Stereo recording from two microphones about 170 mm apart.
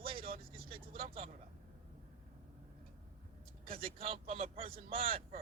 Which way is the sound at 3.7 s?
35° right (ahead or behind).